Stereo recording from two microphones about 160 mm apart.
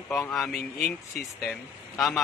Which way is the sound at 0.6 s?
65° left (ahead or behind).